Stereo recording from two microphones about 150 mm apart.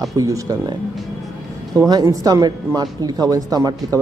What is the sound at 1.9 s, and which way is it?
Speech, 25° right (ahead or behind).